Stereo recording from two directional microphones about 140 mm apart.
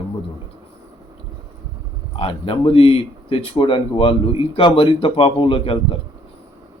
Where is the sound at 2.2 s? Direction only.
40° left (ahead or behind).